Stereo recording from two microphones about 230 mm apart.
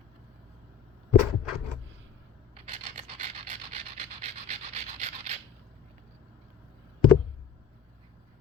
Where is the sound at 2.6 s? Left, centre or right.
Right.